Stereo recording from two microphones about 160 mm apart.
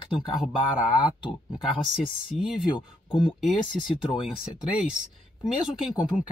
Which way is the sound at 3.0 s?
30° left (ahead or behind).